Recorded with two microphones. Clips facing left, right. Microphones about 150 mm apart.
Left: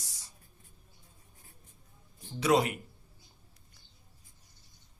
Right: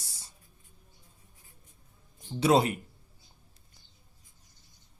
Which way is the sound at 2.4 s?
30° right (ahead or behind).